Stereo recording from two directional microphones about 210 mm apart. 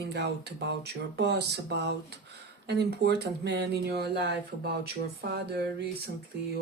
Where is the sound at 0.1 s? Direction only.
55° right (ahead or behind).